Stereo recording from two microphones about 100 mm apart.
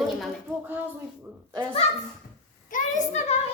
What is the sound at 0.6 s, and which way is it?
Speech, 20° right (ahead or behind).